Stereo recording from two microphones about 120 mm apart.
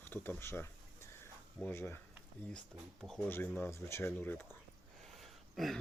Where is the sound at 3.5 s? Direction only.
20° left (ahead or behind).